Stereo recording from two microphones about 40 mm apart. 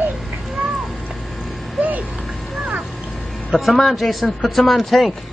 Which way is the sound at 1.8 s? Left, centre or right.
Right.